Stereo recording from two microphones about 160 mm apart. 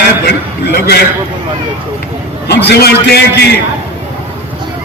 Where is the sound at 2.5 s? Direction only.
90° left.